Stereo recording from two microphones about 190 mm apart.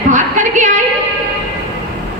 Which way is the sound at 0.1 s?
40° right (ahead or behind).